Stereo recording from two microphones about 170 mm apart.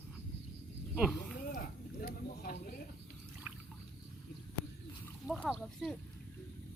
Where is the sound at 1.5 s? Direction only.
55° left (ahead or behind).